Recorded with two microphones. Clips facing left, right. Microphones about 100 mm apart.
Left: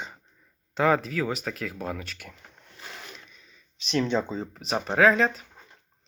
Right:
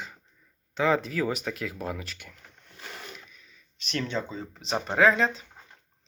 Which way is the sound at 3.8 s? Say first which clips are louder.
Left 6 dB; 25° left (ahead or behind).